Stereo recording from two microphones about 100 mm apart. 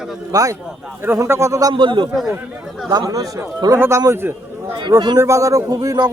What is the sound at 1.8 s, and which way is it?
Speech, 55° right (ahead or behind).